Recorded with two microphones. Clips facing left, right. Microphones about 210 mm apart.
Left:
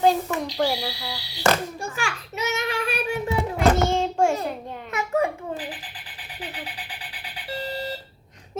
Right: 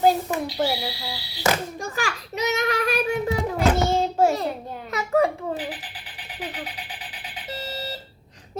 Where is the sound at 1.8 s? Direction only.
35° right (ahead or behind).